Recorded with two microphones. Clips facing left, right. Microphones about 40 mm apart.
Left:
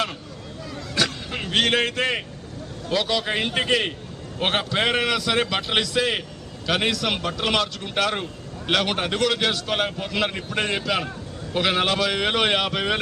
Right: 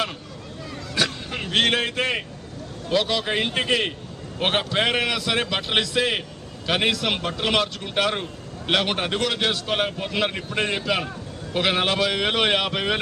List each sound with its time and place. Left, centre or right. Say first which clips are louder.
0.9 s a sound: even; centre
1.5 s a man's voice: even; centre
3.5 s a man's voice: left 3 dB; centre
4.4 s a man's voice: right 1 dB; centre
8.1 s a sound: even; centre
8.7 s a man's voice: even; centre